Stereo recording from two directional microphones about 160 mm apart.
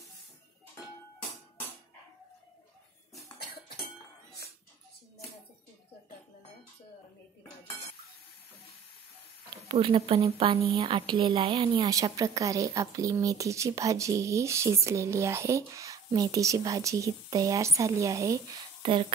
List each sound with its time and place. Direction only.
3.3 s music: 75° left (ahead or behind)
9.7 s a woman's voice: 30° right (ahead or behind)
18.8 s speech: 35° right (ahead or behind)